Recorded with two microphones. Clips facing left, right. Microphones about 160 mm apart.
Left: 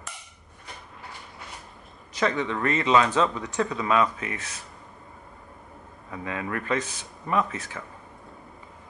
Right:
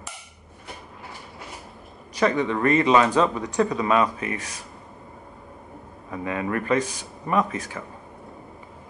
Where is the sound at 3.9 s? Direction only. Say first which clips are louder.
Right 2 dB; 25° right (ahead or behind).